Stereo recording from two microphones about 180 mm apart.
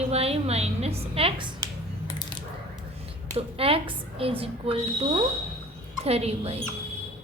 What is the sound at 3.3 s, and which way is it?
A woman's voice, 30° right (ahead or behind).